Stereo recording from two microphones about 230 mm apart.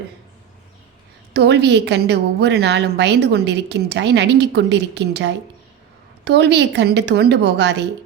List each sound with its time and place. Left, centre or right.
1.3 s a woman's voice: right